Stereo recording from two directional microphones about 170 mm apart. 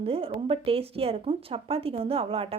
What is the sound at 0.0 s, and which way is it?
Speech, 35° right (ahead or behind).